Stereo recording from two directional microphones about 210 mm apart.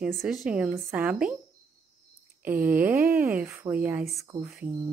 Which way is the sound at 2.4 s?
10° right (ahead or behind).